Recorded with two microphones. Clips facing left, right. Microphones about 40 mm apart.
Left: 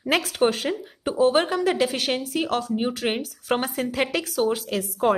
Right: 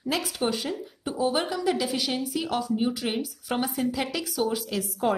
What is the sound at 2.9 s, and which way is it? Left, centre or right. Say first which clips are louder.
A woman's voice: left 3 dB; left.